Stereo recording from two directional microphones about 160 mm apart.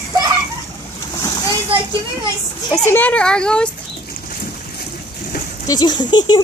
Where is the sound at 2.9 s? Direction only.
10° left (ahead or behind).